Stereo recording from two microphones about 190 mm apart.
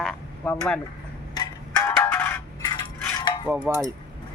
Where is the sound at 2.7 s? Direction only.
25° left (ahead or behind).